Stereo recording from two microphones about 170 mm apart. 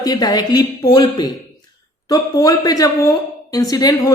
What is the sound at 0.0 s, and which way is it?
A woman's voice, 25° left (ahead or behind).